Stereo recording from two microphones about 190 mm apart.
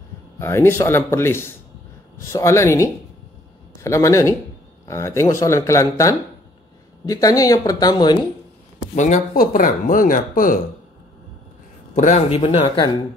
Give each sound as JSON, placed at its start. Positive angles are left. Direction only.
{"t": 0.4, "sound": "a woman's voice", "side_deg": 15}
{"t": 8.9, "sound": "speech", "side_deg": 40}
{"t": 11.9, "sound": "speech", "side_deg": 40}